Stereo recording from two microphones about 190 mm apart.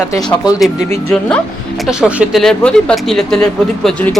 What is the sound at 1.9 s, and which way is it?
Speech, 5° right (ahead or behind).